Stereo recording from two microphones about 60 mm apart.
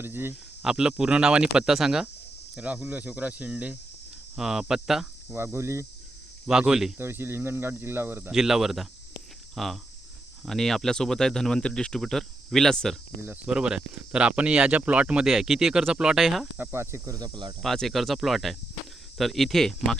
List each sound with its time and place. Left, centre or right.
0.0 s speech: right
0.6 s speech: centre
4.4 s speech: centre
5.3 s cricket: right
6.5 s speech: centre
7.0 s speech: right
8.3 s speech: centre
13.5 s speech: centre
15.3 s speech: centre
16.6 s cricket: right
17.6 s speech: centre